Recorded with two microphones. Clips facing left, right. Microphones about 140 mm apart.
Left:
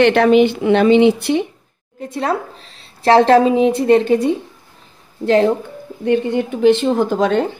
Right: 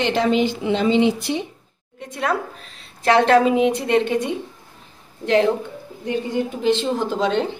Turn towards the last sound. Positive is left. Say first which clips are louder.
# left 5 dB
turn(degrees=50)  # may be behind; listen again after turning